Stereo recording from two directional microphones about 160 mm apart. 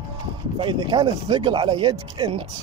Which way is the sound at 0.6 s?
30° right (ahead or behind).